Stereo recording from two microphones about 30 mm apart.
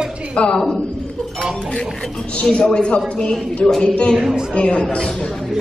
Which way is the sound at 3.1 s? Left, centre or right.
Left.